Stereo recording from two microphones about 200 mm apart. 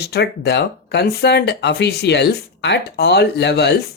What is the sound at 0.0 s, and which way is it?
Speech, 55° left (ahead or behind).